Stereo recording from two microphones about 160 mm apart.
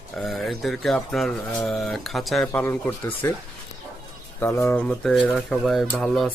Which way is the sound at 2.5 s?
10° left (ahead or behind).